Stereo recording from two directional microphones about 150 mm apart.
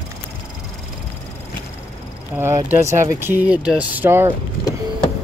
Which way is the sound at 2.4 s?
15° right (ahead or behind).